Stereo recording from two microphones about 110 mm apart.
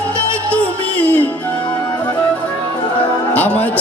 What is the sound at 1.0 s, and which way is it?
Music, 15° left (ahead or behind).